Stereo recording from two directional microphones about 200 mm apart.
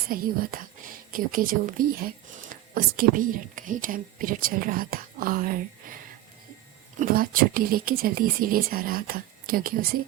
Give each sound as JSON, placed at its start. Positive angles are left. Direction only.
{"t": 0.1, "sound": "a woman's voice", "side_deg": -45}
{"t": 7.0, "sound": "speech", "side_deg": -45}